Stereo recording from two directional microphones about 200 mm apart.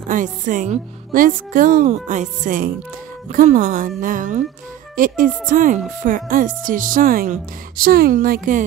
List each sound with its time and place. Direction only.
0.1 s speech: 40° right (ahead or behind)